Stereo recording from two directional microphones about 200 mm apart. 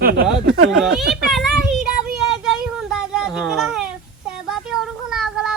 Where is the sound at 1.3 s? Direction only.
Centre (ahead or behind).